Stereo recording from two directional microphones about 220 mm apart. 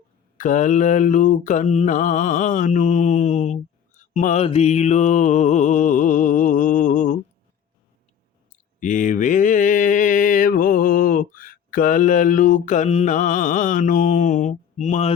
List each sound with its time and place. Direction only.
0.3 s mantra: 35° left (ahead or behind)
8.8 s mantra: 35° left (ahead or behind)